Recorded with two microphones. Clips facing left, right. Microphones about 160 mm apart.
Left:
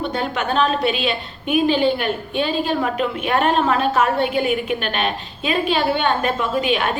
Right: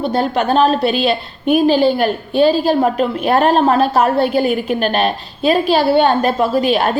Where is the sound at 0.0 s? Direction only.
35° right (ahead or behind).